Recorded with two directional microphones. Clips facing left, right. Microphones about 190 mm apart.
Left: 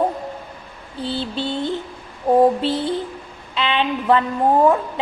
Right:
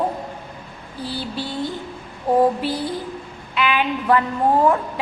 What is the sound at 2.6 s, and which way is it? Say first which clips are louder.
Music: left 3 dB; 25° left (ahead or behind).